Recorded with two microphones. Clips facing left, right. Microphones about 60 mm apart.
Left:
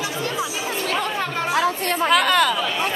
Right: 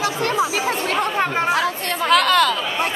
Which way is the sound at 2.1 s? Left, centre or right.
Centre.